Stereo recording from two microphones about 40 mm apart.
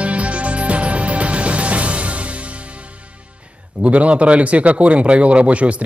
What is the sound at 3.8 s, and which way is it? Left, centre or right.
Speech, right.